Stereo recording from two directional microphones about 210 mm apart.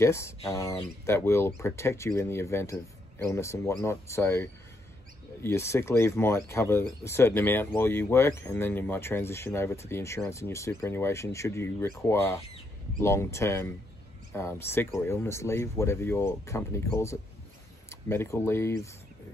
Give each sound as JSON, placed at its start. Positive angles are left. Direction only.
{"t": 0.0, "sound": "speech", "side_deg": 15}